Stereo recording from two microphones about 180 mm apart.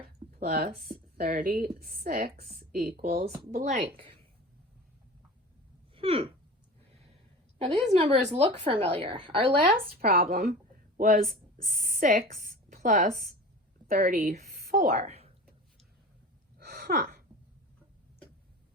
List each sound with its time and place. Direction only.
0.3 s a sound: 55° right (ahead or behind)
0.8 s a woman's voice: 55° right (ahead or behind)
3.8 s a woman's voice: 30° right (ahead or behind)
5.9 s a sound: 30° right (ahead or behind)
7.9 s a woman's voice: 35° right (ahead or behind)
9.9 s a woman's voice: 60° right (ahead or behind); by 15.3 s 35° right (ahead or behind)
16.6 s gasp: 55° right (ahead or behind)